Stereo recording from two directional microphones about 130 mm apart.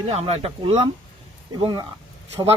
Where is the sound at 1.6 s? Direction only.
35° right (ahead or behind).